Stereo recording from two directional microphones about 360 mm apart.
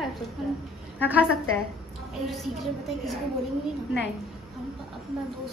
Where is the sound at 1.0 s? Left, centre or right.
Centre.